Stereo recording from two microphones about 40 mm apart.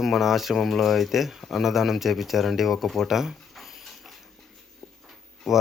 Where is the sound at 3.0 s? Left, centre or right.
Centre.